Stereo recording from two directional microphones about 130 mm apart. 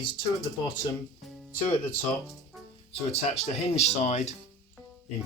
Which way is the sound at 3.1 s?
55° left (ahead or behind).